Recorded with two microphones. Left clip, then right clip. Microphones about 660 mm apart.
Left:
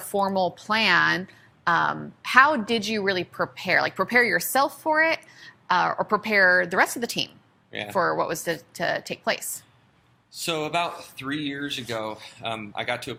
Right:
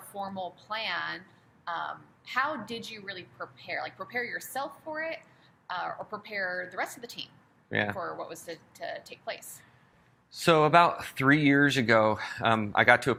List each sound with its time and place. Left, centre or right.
0.1 s a woman's voice: left
7.7 s speech: right
7.9 s a woman's voice: left
10.3 s speech: right